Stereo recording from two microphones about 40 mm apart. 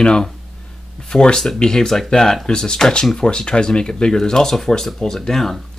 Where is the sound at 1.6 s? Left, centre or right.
Centre.